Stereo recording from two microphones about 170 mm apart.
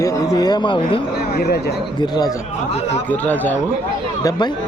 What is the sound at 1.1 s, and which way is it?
Speech, 70° left (ahead or behind).